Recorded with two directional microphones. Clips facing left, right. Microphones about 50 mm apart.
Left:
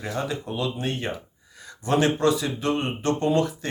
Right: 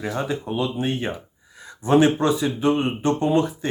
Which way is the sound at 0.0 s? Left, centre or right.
Right.